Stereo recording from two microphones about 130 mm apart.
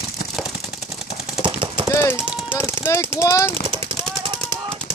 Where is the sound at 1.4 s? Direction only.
40° right (ahead or behind).